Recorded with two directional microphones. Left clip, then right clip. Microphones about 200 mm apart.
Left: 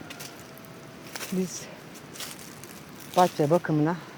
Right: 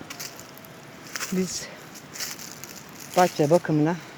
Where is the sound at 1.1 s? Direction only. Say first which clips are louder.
Right 5 dB; 10° right (ahead or behind).